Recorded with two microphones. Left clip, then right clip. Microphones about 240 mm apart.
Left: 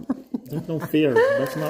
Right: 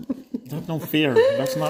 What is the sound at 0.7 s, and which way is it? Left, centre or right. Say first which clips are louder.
Speech: left 1 dB; right.